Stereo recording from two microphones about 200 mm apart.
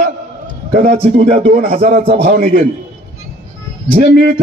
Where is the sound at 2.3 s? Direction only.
45° right (ahead or behind).